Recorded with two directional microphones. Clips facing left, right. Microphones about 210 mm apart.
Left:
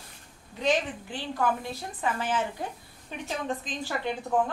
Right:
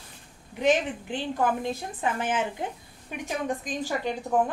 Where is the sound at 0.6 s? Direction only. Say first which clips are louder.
Right 3 dB; 20° right (ahead or behind).